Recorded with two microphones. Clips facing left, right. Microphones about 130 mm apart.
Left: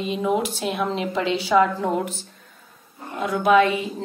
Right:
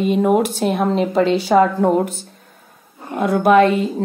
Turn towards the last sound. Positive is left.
turn(degrees=-50)  # may be behind; listen again after turning